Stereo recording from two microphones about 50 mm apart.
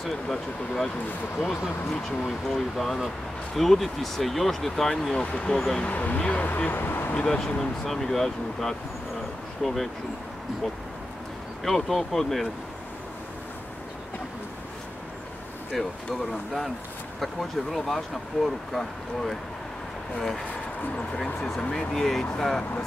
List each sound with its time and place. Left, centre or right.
0.0 s speech: centre
1.9 s speech: centre
5.8 s speech: left
7.2 s speech: centre
11.6 s speech: centre
16.1 s speech: centre
21.7 s speech: centre